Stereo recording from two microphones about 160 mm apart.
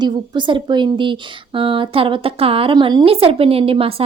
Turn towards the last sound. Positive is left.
turn(degrees=-35)  # may be behind; listen again after turning